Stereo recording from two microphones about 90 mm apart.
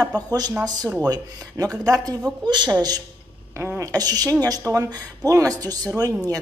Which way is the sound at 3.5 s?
30° right (ahead or behind).